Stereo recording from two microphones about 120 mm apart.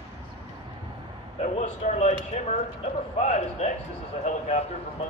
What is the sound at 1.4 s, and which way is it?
Speech, 80° left.